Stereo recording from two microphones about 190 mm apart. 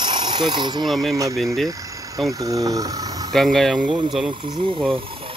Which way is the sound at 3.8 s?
25° right (ahead or behind).